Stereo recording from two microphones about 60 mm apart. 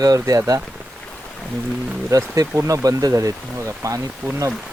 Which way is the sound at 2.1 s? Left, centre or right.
Right.